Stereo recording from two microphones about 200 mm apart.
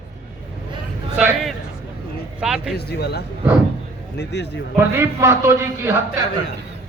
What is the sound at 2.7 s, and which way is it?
Speech, 55° left (ahead or behind).